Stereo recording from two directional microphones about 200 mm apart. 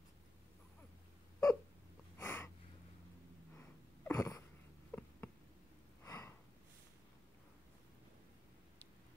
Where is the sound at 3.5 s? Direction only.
15° left (ahead or behind).